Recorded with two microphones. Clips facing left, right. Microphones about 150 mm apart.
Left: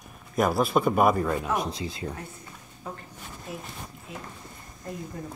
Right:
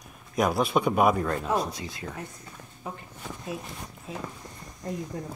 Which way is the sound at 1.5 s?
25° left (ahead or behind).